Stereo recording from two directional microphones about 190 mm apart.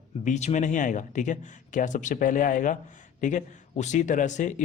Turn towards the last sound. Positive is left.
turn(degrees=40)  # may be behind; listen again after turning